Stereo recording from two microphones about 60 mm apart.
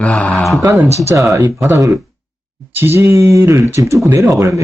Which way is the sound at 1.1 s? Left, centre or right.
Right.